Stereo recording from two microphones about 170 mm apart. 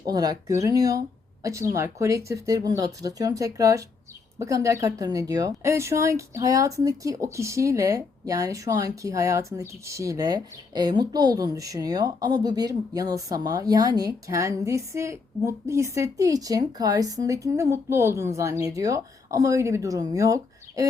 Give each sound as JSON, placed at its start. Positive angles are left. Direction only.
{"t": 0.0, "sound": "speech", "side_deg": -20}